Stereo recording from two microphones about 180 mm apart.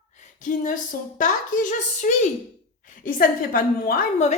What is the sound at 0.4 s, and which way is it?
Speech, 45° left (ahead or behind).